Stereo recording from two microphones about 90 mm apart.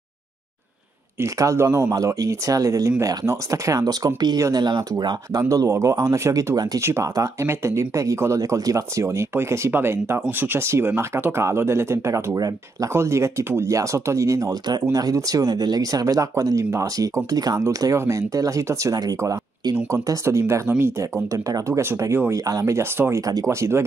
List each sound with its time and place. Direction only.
1.2 s speech: 35° right (ahead or behind)
6.5 s speech: 45° right (ahead or behind)
6.8 s speech: 35° right (ahead or behind)
12.4 s speech: 45° right (ahead or behind)
12.9 s speech: 30° right (ahead or behind)
19.9 s speech: 30° right (ahead or behind)